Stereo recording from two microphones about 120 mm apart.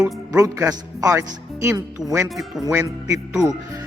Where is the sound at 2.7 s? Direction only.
25° right (ahead or behind).